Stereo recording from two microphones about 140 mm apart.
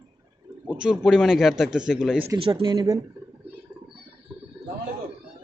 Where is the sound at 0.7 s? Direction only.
5° right (ahead or behind).